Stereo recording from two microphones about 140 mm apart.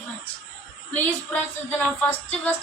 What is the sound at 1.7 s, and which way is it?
Speech, 15° left (ahead or behind).